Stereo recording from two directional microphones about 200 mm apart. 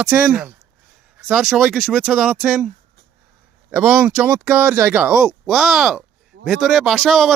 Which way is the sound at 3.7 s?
5° right (ahead or behind).